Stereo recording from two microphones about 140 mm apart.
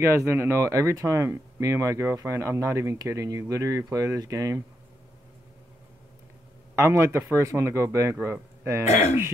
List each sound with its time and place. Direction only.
0.0 s speech: 20° right (ahead or behind)
6.7 s speech: 20° right (ahead or behind)
8.8 s speech: 50° left (ahead or behind)